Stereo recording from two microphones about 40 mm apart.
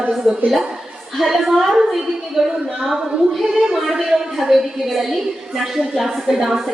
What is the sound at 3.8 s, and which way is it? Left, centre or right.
A woman's voice, centre.